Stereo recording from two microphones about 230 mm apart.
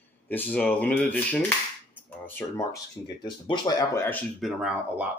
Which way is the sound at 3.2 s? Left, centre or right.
Centre.